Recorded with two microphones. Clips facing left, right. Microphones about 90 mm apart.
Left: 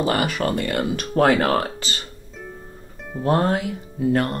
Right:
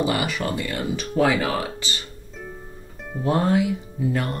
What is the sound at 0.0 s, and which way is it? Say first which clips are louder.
Speech: left 2 dB; 45° left (ahead or behind).